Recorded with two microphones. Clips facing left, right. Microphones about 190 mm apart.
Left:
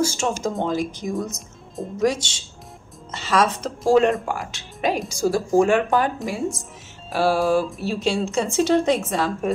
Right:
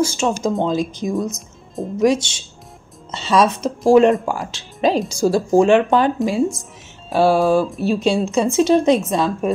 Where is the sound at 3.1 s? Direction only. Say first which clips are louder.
Right 4 dB; 20° right (ahead or behind).